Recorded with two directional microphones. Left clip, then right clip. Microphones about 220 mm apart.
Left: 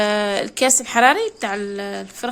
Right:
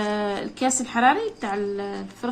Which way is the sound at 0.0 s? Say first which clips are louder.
Left 7 dB; 45° left (ahead or behind).